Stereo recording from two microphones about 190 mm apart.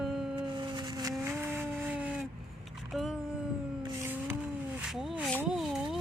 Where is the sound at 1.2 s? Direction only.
15° right (ahead or behind).